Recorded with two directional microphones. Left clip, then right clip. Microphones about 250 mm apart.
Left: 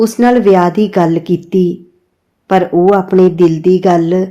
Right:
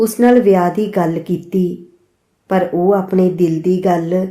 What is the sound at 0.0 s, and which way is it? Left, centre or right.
A woman's voice, left.